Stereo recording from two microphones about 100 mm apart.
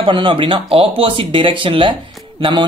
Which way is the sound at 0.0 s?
55° right (ahead or behind).